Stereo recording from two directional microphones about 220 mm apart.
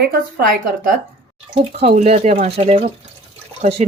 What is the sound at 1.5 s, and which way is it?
Speech, 30° right (ahead or behind).